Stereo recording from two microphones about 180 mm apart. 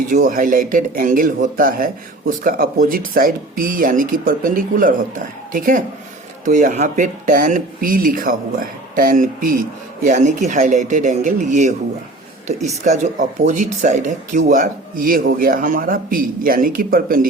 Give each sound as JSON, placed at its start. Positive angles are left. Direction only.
{"t": 0.1, "sound": "speech", "side_deg": -50}
{"t": 12.7, "sound": "speech", "side_deg": -40}